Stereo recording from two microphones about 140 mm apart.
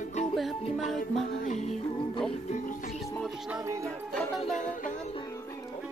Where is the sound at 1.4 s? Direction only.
55° left (ahead or behind).